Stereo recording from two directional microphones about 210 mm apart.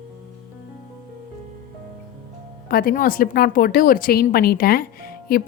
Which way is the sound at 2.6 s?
45° left (ahead or behind).